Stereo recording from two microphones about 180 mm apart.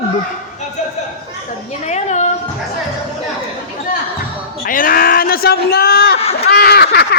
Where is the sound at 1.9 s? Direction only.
40° left (ahead or behind).